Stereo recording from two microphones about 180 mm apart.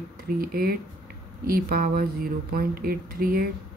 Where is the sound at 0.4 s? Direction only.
55° right (ahead or behind).